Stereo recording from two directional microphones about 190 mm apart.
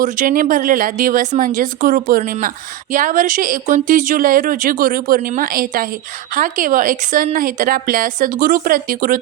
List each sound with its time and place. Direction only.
0.0 s speech: 45° right (ahead or behind)